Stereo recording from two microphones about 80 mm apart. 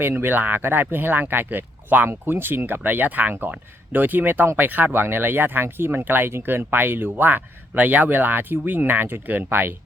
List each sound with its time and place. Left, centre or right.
0.0 s speech: right